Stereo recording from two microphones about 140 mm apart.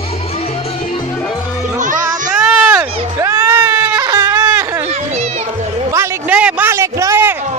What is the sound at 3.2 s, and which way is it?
Sheep, 20° right (ahead or behind).